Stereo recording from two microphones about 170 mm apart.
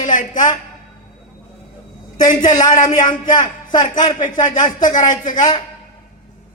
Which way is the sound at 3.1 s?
25° left (ahead or behind).